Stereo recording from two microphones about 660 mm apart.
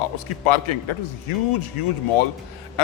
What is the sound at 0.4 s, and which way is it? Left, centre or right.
A man's voice, left.